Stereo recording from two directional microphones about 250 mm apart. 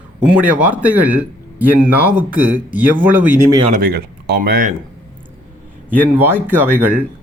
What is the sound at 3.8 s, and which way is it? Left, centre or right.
Speech, right.